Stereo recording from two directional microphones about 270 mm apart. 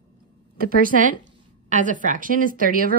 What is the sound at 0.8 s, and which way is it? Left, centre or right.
A woman's voice, right.